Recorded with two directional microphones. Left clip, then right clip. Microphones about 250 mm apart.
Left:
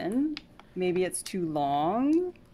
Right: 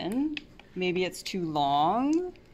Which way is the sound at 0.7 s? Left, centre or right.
Centre.